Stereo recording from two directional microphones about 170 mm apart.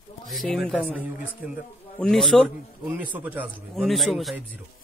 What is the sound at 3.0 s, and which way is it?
Speech, 10° right (ahead or behind).